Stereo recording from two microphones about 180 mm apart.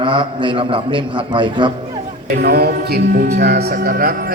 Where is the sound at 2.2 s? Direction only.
60° right (ahead or behind).